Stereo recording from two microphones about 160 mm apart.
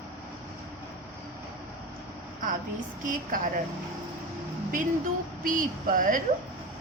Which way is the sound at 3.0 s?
55° right (ahead or behind).